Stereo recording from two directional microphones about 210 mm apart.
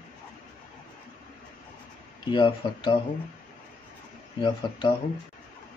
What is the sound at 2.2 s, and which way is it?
Speech, 20° left (ahead or behind).